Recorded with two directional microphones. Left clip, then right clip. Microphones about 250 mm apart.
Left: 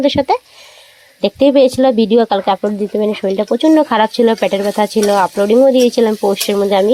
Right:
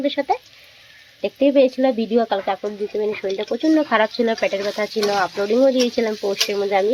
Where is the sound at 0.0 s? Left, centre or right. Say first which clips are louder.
Left 8 dB; left.